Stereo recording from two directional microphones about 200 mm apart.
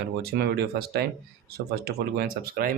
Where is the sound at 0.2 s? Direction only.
50° right (ahead or behind).